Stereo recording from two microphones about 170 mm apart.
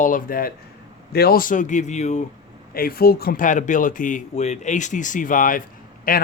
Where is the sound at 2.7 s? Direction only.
60° left (ahead or behind).